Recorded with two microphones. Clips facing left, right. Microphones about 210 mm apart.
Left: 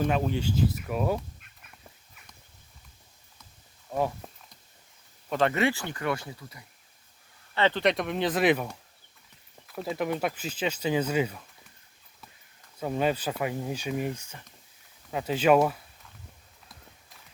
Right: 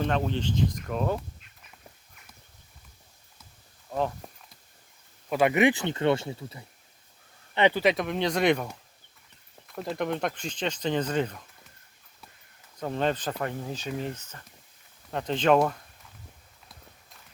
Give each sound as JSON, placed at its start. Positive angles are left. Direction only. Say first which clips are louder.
{"t": 0.0, "sound": "speech", "louder": "left 1 dB", "side_deg": 10}
{"t": 3.8, "sound": "speech", "louder": "even", "side_deg": 5}
{"t": 5.3, "sound": "speech", "louder": "right 3 dB", "side_deg": -10}
{"t": 7.5, "sound": "speech", "louder": "right 3 dB", "side_deg": -15}
{"t": 7.8, "sound": "speech", "louder": "right 1 dB", "side_deg": 0}
{"t": 12.8, "sound": "speech", "louder": "left 1 dB", "side_deg": 10}